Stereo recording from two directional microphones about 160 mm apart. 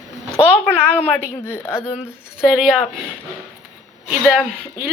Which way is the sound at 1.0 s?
10° left (ahead or behind).